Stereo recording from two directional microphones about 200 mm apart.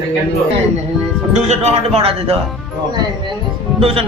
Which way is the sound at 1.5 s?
30° right (ahead or behind).